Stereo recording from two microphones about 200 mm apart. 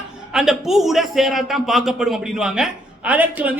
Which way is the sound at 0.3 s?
Centre (ahead or behind).